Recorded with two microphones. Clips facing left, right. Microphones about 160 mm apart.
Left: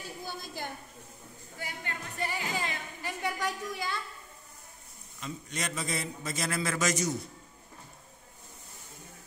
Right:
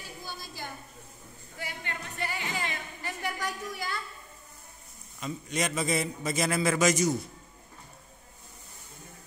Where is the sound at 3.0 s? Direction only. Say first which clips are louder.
Left 2 dB; 15° left (ahead or behind).